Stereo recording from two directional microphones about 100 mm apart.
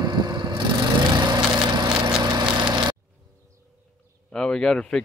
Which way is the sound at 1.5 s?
50° right (ahead or behind).